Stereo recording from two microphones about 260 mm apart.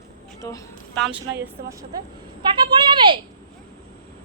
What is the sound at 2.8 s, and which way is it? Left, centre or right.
Speech, centre.